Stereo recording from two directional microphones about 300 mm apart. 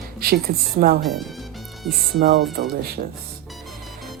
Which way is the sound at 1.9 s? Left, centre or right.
Right.